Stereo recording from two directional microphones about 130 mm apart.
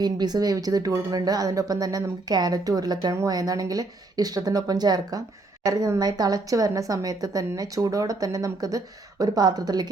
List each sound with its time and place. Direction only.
0.0 s a woman's voice: 30° right (ahead or behind)